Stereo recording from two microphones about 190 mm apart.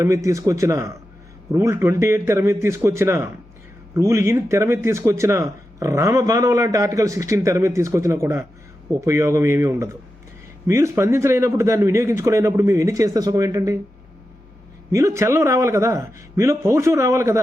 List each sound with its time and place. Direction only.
0.0 s speech: 15° right (ahead or behind)
14.9 s speech: 15° right (ahead or behind)